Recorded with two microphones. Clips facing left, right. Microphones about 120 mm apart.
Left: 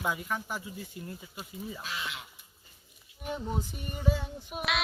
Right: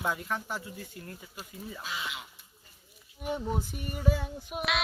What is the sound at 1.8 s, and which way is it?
Speech, 5° right (ahead or behind).